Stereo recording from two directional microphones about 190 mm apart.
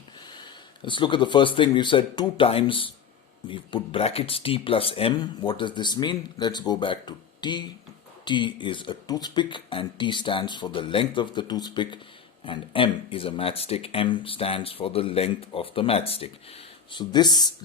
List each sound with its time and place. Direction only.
0.3 s speech: 20° left (ahead or behind)